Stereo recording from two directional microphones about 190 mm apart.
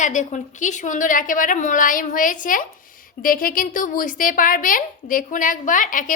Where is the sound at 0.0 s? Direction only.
40° left (ahead or behind).